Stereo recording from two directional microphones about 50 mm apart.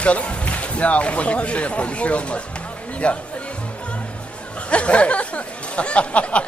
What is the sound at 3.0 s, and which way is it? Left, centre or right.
Speech, left.